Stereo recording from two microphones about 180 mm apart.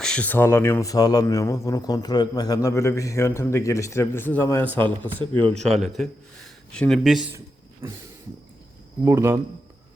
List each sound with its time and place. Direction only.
0.0 s a man's voice: 5° left (ahead or behind)
7.3 s a sound: 15° right (ahead or behind)
9.0 s speech: 15° right (ahead or behind)